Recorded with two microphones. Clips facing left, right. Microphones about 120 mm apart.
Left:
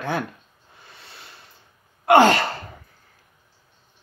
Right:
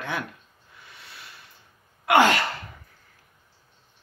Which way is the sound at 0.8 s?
30° left (ahead or behind).